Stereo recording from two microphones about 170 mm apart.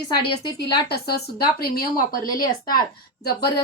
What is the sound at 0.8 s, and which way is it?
Speech, 65° left (ahead or behind).